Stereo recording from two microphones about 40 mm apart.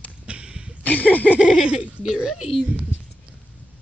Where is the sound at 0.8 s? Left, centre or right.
Left.